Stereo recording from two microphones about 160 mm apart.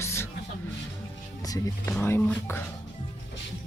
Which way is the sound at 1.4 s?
20° left (ahead or behind).